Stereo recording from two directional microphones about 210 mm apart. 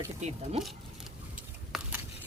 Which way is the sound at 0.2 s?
30° right (ahead or behind).